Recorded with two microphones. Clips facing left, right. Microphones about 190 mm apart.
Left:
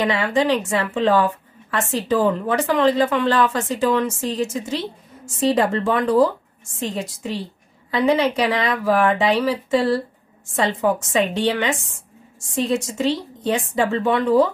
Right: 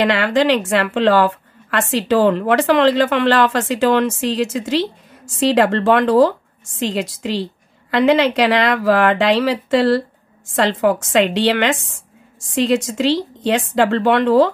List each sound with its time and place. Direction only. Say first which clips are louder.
0.0 s a woman's voice: right 4 dB; 85° right